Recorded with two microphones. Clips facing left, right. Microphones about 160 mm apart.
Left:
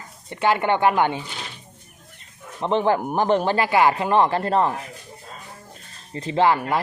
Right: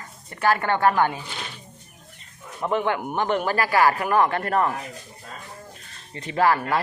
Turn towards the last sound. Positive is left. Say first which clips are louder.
# left 2 dB
turn(degrees=15)  # may be behind; listen again after turning